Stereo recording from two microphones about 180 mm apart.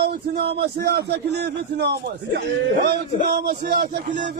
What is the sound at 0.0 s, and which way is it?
A man's voice, 60° right (ahead or behind).